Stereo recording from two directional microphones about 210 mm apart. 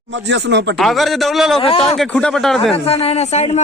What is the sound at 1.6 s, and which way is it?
Speech, 25° left (ahead or behind).